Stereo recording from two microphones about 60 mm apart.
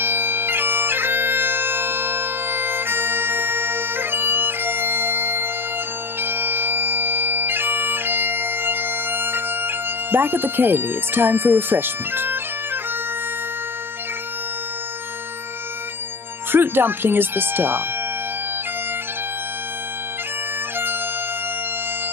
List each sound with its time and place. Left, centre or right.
0.0 s bagpipes: right
10.1 s speech: right
16.5 s speech: right